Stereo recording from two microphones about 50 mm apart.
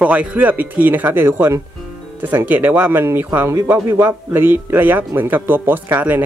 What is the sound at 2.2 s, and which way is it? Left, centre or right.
Speech, right.